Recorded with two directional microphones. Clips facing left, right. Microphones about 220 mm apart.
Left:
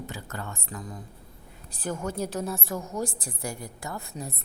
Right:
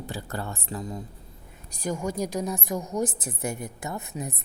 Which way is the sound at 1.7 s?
10° right (ahead or behind).